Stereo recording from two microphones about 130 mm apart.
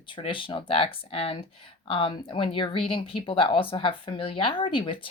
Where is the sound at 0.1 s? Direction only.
40° left (ahead or behind).